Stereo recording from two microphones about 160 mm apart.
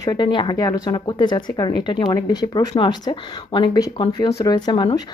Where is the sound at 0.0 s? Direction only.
25° left (ahead or behind).